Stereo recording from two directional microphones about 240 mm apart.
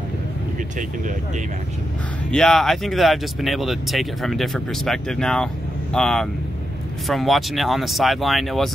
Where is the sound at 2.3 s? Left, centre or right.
Centre.